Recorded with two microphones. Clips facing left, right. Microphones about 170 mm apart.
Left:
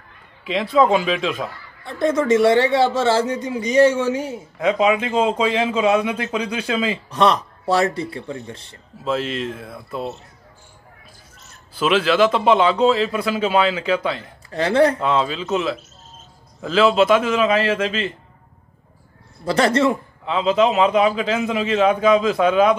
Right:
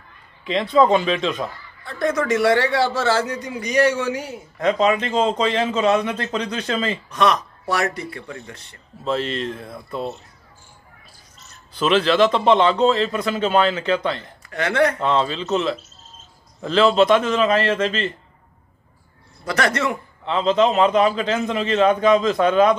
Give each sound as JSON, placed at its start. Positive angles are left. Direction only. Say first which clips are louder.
{"t": 0.4, "sound": "speech", "louder": "even", "side_deg": 5}
{"t": 1.9, "sound": "a man's voice", "louder": "left 3 dB", "side_deg": 25}
{"t": 4.6, "sound": "speech", "louder": "left 1 dB", "side_deg": 5}
{"t": 7.1, "sound": "a man's voice", "louder": "left 2 dB", "side_deg": 30}
{"t": 9.0, "sound": "speech", "louder": "even", "side_deg": 5}
{"t": 11.7, "sound": "speech", "louder": "even", "side_deg": 5}
{"t": 14.5, "sound": "a man's voice", "louder": "left 3 dB", "side_deg": 30}
{"t": 15.0, "sound": "speech", "louder": "even", "side_deg": 5}
{"t": 19.4, "sound": "a man's voice", "louder": "left 5 dB", "side_deg": 30}
{"t": 20.2, "sound": "speech", "louder": "even", "side_deg": 5}